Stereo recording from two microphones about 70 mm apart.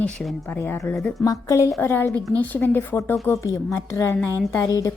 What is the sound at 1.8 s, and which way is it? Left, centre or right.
A woman's voice, left.